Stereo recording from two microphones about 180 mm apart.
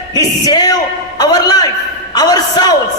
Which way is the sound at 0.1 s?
20° left (ahead or behind).